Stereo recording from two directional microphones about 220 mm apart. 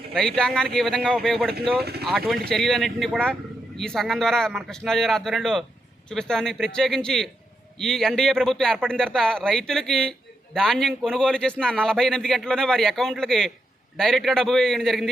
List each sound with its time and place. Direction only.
0.1 s a man's voice: 5° left (ahead or behind)
1.8 s speech: 45° right (ahead or behind)
2.0 s a man's voice: centre (ahead or behind)